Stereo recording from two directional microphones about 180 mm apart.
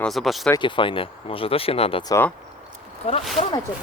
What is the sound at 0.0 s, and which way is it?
Speech, centre (ahead or behind).